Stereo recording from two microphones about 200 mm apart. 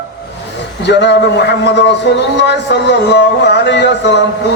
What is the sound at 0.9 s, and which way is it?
A man's voice, 60° left (ahead or behind).